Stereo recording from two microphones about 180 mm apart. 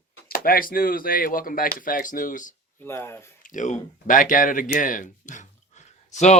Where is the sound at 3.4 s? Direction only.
45° left (ahead or behind).